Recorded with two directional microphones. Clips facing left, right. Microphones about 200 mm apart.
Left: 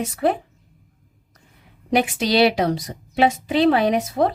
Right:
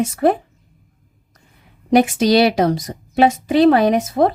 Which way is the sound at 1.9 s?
45° right (ahead or behind).